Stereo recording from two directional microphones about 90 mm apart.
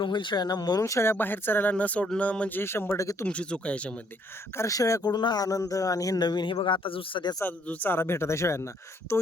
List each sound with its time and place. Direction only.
0.0 s a man's voice: 60° left (ahead or behind)
0.8 s speech: 35° left (ahead or behind)
1.1 s speech: 20° left (ahead or behind)
2.6 s speech: 25° left (ahead or behind)
3.0 s speech: 35° left (ahead or behind)
3.2 s speech: 10° left (ahead or behind)
4.5 s speech: 35° left (ahead or behind)
5.0 s a man's voice: 50° left (ahead or behind); by 7.3 s 65° left (ahead or behind)
7.4 s speech: 20° left (ahead or behind)